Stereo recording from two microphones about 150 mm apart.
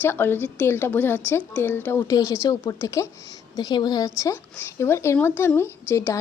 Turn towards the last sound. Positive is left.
turn(degrees=15)  # may be behind; listen again after turning